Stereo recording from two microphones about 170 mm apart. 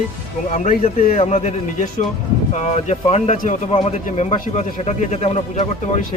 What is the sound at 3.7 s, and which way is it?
A man's voice, 35° left (ahead or behind).